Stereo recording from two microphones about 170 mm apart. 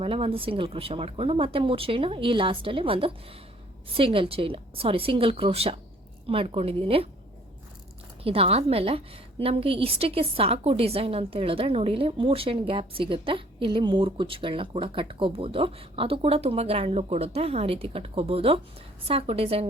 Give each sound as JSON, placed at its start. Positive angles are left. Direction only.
{"t": 0.0, "sound": "a woman's voice", "side_deg": -35}
{"t": 8.2, "sound": "a woman's voice", "side_deg": -35}